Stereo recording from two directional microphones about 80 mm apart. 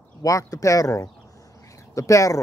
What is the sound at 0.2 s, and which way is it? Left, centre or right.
Speech, left.